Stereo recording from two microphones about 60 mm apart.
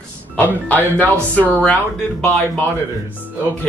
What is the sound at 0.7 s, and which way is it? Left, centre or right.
Speech, left.